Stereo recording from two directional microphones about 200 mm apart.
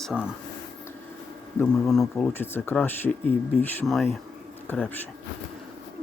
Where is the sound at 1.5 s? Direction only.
5° left (ahead or behind).